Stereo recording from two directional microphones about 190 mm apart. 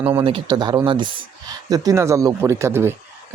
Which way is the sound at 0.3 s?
25° right (ahead or behind).